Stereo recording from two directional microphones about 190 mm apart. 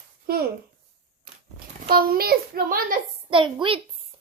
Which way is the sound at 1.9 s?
50° right (ahead or behind).